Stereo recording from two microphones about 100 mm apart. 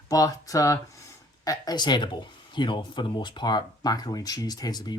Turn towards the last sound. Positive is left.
turn(degrees=45)  # may be behind; listen again after turning